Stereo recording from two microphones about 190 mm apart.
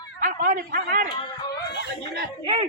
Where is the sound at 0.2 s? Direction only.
40° right (ahead or behind).